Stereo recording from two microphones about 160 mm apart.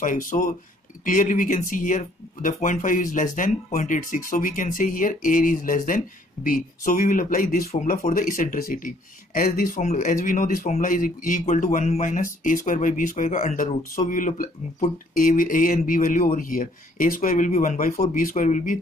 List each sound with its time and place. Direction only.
0.0 s speech: 55° left (ahead or behind)